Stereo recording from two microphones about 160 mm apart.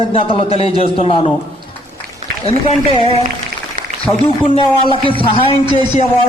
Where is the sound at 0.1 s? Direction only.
35° left (ahead or behind).